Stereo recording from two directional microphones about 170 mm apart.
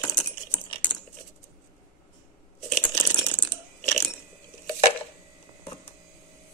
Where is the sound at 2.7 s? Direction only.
10° left (ahead or behind).